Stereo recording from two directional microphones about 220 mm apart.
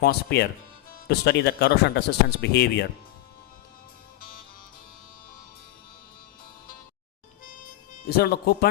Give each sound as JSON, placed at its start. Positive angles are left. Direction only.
{"t": 0.0, "sound": "speech", "side_deg": 50}
{"t": 8.0, "sound": "speech", "side_deg": 45}